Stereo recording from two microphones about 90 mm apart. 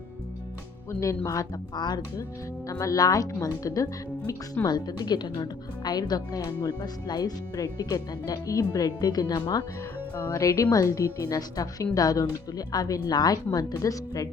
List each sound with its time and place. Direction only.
0.9 s a woman's voice: 35° left (ahead or behind); by 2.2 s 50° left (ahead or behind)
2.6 s a woman's voice: 40° left (ahead or behind)
10.2 s a woman's voice: 35° left (ahead or behind)